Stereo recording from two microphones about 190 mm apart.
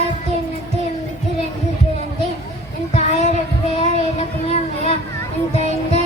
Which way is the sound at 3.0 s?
35° left (ahead or behind).